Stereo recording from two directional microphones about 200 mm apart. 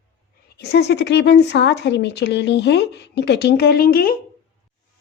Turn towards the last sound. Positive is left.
turn(degrees=45)  # may be behind; listen again after turning